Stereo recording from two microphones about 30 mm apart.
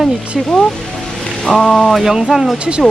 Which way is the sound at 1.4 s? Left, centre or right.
Centre.